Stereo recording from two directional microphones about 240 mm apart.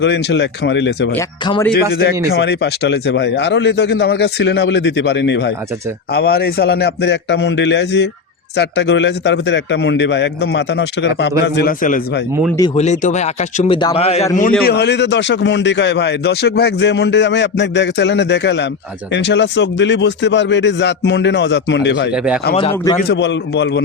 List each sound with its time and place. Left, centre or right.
0.0 s a man's voice: left
14.6 s a man's voice: left
22.1 s speech: centre
22.7 s a man's voice: centre
23.0 s a man's voice: left